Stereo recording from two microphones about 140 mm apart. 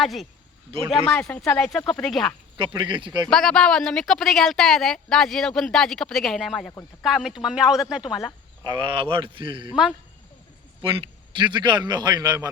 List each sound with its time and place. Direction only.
0.0 s speech: centre (ahead or behind)
2.7 s a man's voice: 35° right (ahead or behind)
3.2 s speech: 5° left (ahead or behind)
8.8 s a man's voice: 40° right (ahead or behind)
10.8 s a man's voice: 40° right (ahead or behind)